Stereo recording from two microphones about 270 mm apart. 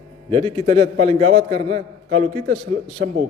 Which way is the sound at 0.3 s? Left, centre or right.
Right.